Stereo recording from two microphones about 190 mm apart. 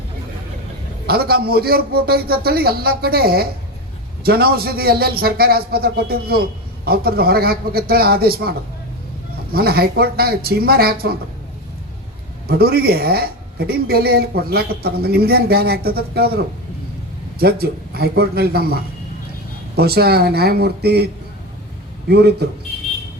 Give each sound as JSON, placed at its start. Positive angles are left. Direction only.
{"t": 1.0, "sound": "a man's voice", "side_deg": -55}
{"t": 12.5, "sound": "a man's voice", "side_deg": -55}
{"t": 17.4, "sound": "a man's voice", "side_deg": -55}